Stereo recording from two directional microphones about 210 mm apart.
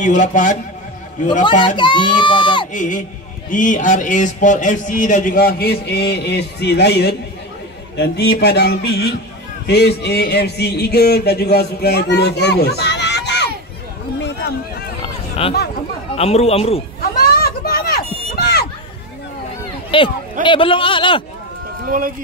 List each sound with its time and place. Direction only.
0.0 s speech: 35° left (ahead or behind)
1.8 s speech: 20° left (ahead or behind)
2.7 s speech: 40° left (ahead or behind); by 13.5 s 55° left (ahead or behind)
15.0 s a sound: 25° left (ahead or behind)
16.2 s speech: 30° left (ahead or behind)
17.2 s children playing: 45° left (ahead or behind)
19.9 s speech: 25° left (ahead or behind)
21.8 s speech: 40° right (ahead or behind)